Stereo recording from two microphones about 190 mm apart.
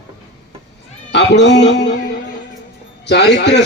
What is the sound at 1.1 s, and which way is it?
A man's voice, 65° left (ahead or behind).